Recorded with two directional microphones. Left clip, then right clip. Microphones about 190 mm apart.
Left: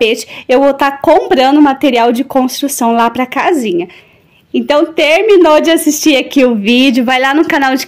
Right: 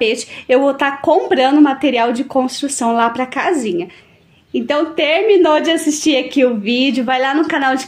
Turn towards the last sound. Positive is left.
turn(degrees=40)  # may be behind; listen again after turning